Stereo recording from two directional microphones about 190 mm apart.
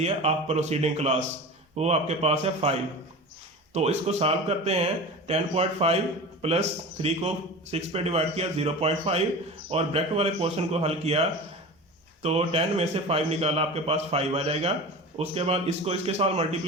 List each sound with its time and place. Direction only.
0.0 s speech: 35° right (ahead or behind)
3.8 s speech: 35° right (ahead or behind)